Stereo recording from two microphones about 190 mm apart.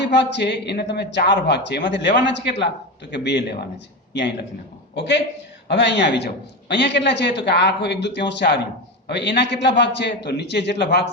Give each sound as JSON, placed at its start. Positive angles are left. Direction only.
{"t": 0.0, "sound": "a man's voice", "side_deg": 60}